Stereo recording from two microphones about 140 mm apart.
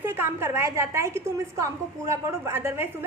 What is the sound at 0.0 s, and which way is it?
A woman's voice, 15° right (ahead or behind).